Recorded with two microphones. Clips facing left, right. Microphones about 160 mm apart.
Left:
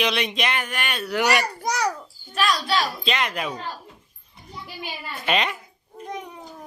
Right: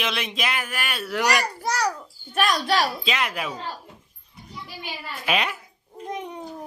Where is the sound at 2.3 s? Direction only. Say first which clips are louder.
Right 1 dB; 50° right (ahead or behind).